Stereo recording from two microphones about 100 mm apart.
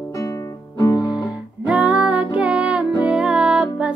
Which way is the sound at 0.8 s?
35° left (ahead or behind).